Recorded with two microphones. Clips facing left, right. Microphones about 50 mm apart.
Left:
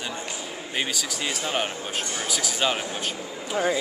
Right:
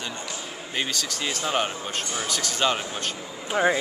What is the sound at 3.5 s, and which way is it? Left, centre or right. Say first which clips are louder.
Speech: right 3 dB; right.